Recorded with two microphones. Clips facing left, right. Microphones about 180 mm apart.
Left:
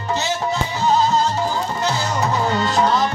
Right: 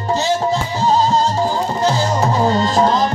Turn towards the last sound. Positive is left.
turn(degrees=-35)  # may be behind; listen again after turning